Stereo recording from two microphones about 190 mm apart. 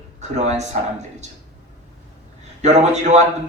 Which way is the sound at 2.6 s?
35° right (ahead or behind).